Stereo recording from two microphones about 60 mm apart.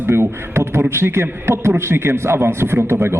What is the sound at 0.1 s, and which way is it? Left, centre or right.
A man's voice, right.